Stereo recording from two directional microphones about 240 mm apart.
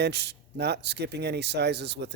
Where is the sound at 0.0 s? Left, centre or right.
Right.